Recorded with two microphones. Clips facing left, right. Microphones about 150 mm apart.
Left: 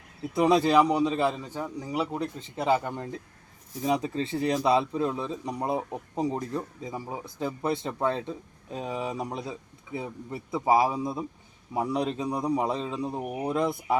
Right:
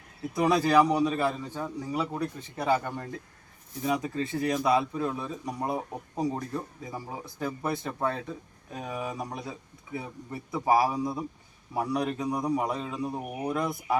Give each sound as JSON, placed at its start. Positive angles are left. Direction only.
{"t": 0.3, "sound": "a man's voice", "side_deg": 25}